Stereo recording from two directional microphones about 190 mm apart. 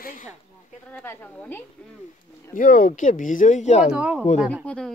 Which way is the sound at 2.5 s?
45° left (ahead or behind).